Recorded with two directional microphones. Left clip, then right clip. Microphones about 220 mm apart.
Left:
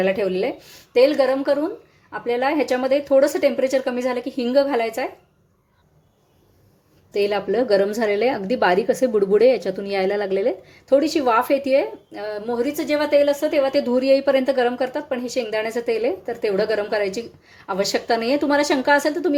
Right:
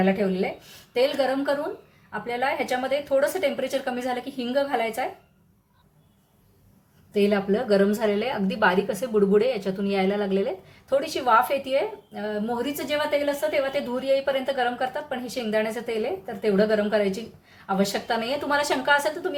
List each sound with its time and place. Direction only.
0.0 s a woman's voice: 40° left (ahead or behind)
7.1 s a woman's voice: 35° left (ahead or behind)